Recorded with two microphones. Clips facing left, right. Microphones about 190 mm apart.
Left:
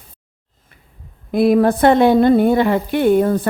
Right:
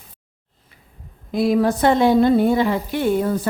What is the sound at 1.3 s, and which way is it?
Speech, 55° left (ahead or behind).